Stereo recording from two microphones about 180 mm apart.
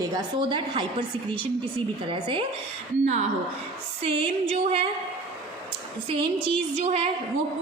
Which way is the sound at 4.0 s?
30° right (ahead or behind).